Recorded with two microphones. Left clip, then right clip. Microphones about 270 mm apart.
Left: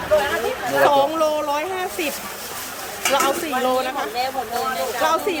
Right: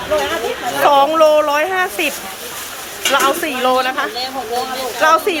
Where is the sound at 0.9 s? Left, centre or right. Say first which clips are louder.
Right 9 dB; centre.